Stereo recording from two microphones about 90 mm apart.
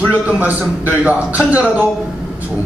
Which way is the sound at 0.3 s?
15° right (ahead or behind).